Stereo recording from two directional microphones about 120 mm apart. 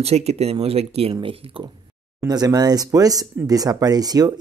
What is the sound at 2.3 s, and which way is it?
Speech, 35° right (ahead or behind).